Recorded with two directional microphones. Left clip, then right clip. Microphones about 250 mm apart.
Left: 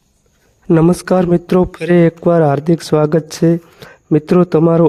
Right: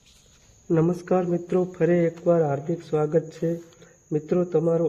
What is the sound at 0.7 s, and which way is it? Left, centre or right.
Speech, left.